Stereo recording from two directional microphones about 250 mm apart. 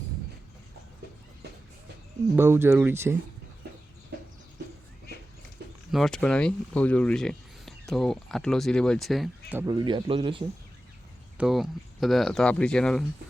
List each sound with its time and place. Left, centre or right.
2.3 s speech: centre
5.9 s speech: centre
9.6 s a man's voice: centre
11.3 s speech: centre